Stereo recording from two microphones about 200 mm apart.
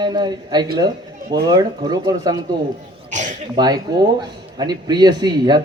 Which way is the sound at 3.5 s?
20° right (ahead or behind).